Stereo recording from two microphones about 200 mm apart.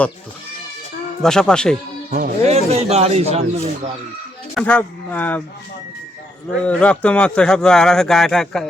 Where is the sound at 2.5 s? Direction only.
30° right (ahead or behind).